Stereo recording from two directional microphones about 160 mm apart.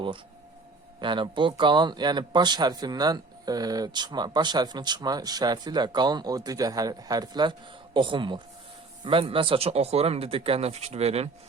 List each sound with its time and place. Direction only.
1.0 s speech: 30° right (ahead or behind)